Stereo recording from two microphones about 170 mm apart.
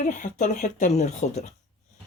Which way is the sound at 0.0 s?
45° left (ahead or behind).